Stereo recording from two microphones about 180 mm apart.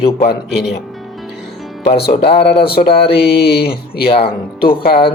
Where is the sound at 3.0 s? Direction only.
65° left (ahead or behind).